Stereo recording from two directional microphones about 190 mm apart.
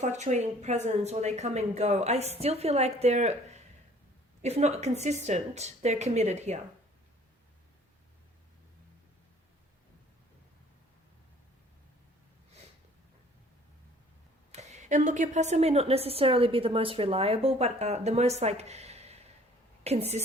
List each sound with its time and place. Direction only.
0.0 s a woman's voice: 40° right (ahead or behind)
14.5 s a woman's voice: 35° right (ahead or behind)